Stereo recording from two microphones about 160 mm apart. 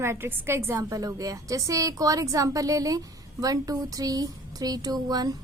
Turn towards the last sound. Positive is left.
turn(degrees=-25)  # may be behind; listen again after turning